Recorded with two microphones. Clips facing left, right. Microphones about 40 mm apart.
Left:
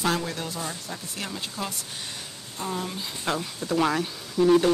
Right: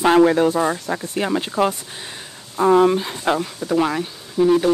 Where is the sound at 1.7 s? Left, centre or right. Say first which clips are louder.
Right 7 dB; right.